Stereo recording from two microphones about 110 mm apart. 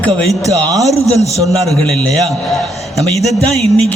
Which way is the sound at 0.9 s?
75° left (ahead or behind).